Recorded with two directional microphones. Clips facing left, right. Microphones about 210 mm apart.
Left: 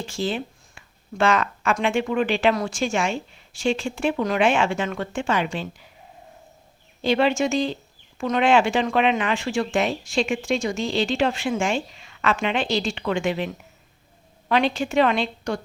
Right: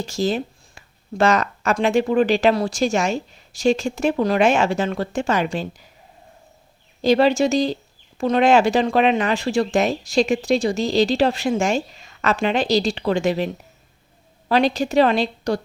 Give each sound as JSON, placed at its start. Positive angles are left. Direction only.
{"t": 0.0, "sound": "speech", "side_deg": -40}
{"t": 7.0, "sound": "speech", "side_deg": -40}